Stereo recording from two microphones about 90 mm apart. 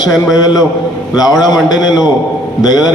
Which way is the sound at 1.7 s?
50° left (ahead or behind).